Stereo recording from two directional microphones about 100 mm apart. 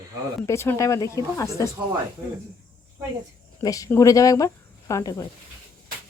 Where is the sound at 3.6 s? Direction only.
35° left (ahead or behind).